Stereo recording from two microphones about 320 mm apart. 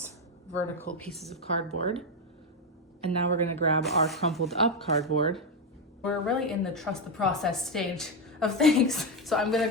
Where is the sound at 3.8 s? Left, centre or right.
Centre.